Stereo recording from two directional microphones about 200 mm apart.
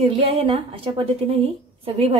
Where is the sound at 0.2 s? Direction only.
30° right (ahead or behind).